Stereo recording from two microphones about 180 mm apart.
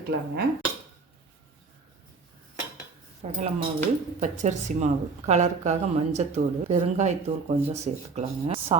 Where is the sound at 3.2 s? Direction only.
35° right (ahead or behind).